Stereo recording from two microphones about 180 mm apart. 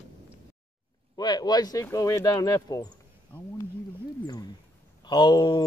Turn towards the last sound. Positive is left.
turn(degrees=25)  # may be behind; listen again after turning